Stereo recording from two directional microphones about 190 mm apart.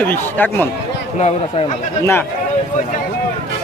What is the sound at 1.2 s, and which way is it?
Speech, 30° left (ahead or behind).